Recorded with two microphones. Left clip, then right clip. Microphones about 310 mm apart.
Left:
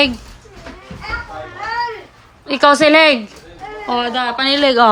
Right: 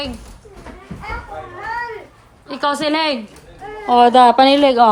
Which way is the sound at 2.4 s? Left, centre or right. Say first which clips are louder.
Left 8 dB; centre.